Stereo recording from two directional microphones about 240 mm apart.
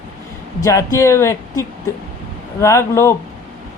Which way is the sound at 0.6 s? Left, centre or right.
Centre.